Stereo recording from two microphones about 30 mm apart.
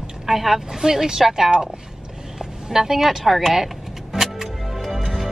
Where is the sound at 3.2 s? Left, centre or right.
Centre.